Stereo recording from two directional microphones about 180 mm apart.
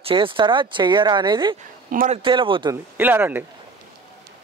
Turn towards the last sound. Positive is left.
turn(degrees=-10)  # may be behind; listen again after turning